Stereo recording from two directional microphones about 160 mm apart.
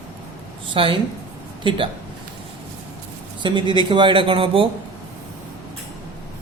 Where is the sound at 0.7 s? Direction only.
35° right (ahead or behind).